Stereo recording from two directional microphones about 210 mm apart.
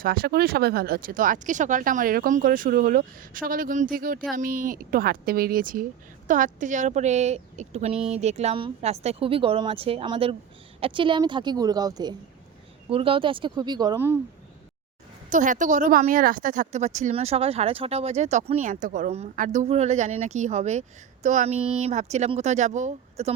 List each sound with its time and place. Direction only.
0.0 s speech: 45° right (ahead or behind); by 14.2 s 10° right (ahead or behind)
15.3 s speech: 35° right (ahead or behind)